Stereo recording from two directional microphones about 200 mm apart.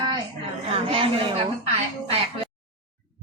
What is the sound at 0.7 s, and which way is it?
Speech, 25° right (ahead or behind).